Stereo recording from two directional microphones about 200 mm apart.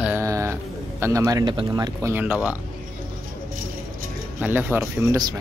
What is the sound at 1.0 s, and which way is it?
Speech, 15° right (ahead or behind).